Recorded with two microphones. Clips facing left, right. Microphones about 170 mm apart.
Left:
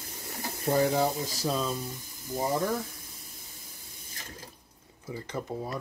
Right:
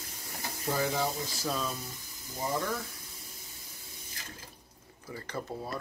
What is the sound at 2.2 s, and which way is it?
Speech, 45° left (ahead or behind).